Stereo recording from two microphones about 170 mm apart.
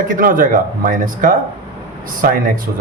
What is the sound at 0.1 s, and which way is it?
Speech, 55° right (ahead or behind).